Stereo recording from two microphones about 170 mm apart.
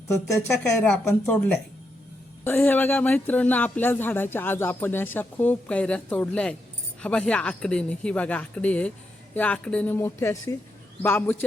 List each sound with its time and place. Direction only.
0.1 s speech: 20° left (ahead or behind)
0.8 s speech: 5° left (ahead or behind)